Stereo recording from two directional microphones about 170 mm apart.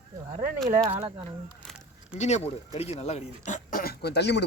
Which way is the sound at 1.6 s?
5° right (ahead or behind).